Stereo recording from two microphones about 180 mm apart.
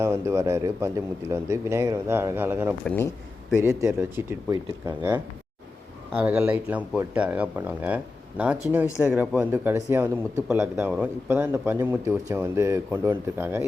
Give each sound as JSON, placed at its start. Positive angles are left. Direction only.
{"t": 0.0, "sound": "speech", "side_deg": -15}
{"t": 2.8, "sound": "speech", "side_deg": 10}
{"t": 3.6, "sound": "speech", "side_deg": -15}